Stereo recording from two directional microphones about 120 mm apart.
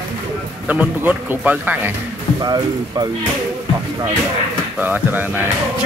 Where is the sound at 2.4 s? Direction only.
35° right (ahead or behind).